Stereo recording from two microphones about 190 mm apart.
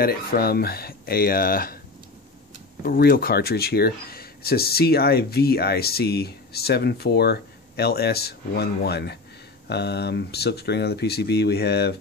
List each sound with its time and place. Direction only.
0.0 s speech: 50° left (ahead or behind)
2.8 s speech: 50° left (ahead or behind)